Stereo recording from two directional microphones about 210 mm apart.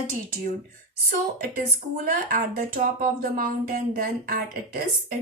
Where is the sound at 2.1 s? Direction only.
40° right (ahead or behind).